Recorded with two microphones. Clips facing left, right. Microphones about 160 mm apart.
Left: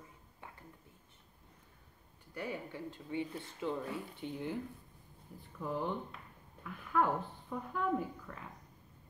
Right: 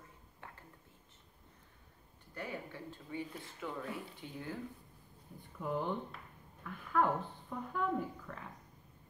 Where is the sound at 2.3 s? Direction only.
15° left (ahead or behind).